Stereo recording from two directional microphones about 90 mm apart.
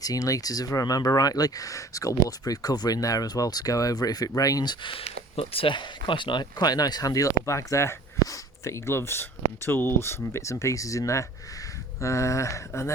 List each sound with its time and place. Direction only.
0.0 s speech: 40° left (ahead or behind)
4.9 s speech: 90° left; by 12.9 s 35° left (ahead or behind)